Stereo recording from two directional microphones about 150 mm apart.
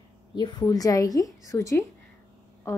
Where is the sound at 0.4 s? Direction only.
30° left (ahead or behind).